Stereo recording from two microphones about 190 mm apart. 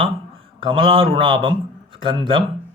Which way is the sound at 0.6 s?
30° right (ahead or behind).